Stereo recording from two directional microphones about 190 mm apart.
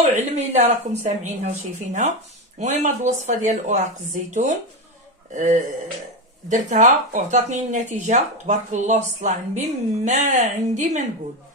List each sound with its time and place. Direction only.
0.0 s speech: 35° right (ahead or behind)